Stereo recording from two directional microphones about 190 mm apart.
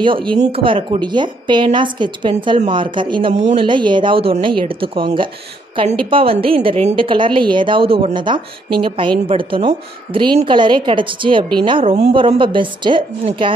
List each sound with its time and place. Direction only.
0.0 s a woman's voice: 25° right (ahead or behind)